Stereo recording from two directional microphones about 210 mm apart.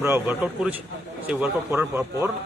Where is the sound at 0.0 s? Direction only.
10° right (ahead or behind).